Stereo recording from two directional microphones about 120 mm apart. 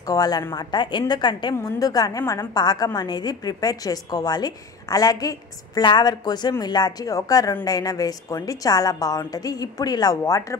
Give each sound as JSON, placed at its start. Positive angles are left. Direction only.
{"t": 0.0, "sound": "a woman's voice", "side_deg": 30}
{"t": 1.5, "sound": "a woman's voice", "side_deg": 25}